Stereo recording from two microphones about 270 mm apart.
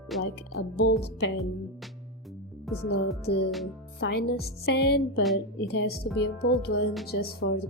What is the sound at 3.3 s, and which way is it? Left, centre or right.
A woman's voice, left.